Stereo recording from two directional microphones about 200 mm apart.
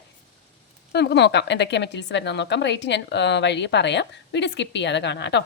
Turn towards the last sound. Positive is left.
turn(degrees=60)  # may be behind; listen again after turning